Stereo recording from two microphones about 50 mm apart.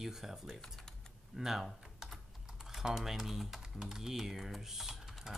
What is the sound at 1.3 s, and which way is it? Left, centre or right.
Typing, centre.